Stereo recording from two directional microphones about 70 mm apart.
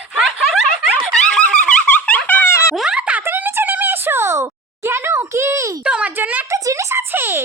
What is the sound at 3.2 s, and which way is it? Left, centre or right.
Music, right.